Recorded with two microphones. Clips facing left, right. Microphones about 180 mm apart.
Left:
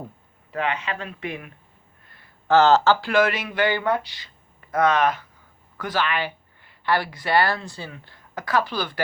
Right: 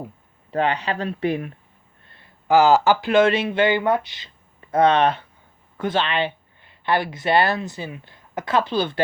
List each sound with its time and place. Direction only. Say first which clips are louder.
0.5 s speech: right 5 dB; 35° right (ahead or behind)
2.5 s speech: right 1 dB; 10° right (ahead or behind)